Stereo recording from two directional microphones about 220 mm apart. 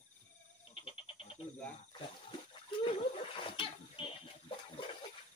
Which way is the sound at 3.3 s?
25° left (ahead or behind).